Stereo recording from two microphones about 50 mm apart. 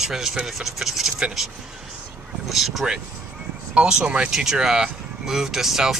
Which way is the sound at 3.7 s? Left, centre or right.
Right.